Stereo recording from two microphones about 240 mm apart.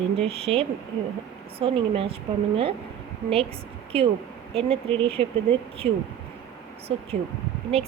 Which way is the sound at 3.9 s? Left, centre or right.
Right.